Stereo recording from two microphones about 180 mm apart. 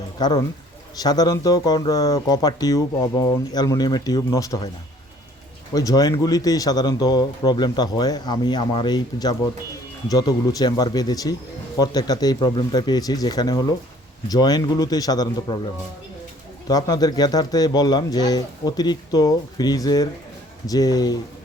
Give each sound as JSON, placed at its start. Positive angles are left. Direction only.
{"t": 0.2, "sound": "speech", "side_deg": 20}
{"t": 5.7, "sound": "speech", "side_deg": 20}
{"t": 16.6, "sound": "speech", "side_deg": 20}